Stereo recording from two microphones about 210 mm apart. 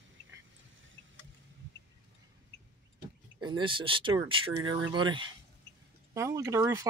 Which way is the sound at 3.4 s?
20° right (ahead or behind).